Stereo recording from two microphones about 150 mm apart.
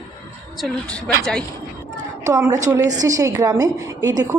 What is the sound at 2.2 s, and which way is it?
A woman's voice, 20° right (ahead or behind).